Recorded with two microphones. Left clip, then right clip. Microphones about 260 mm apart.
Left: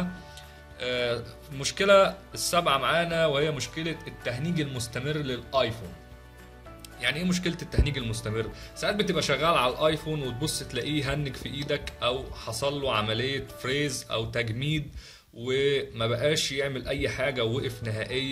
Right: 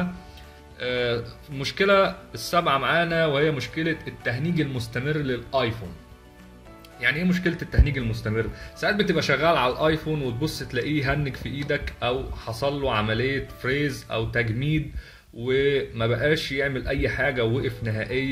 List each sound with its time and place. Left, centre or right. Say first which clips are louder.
0.7 s speech: right 3 dB; left
7.0 s speech: right 5 dB; left